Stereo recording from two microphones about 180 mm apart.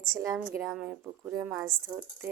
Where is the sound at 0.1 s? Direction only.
15° right (ahead or behind).